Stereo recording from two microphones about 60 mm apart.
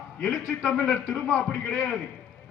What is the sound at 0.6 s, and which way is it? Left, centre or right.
Speech, left.